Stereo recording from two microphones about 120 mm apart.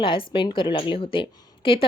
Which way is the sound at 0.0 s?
45° left (ahead or behind).